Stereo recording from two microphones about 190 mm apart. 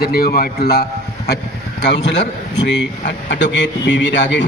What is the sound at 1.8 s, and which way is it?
A man's voice, 65° left (ahead or behind).